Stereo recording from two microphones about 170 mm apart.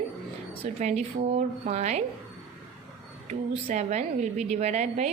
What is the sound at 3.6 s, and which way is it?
A woman's voice, 40° right (ahead or behind).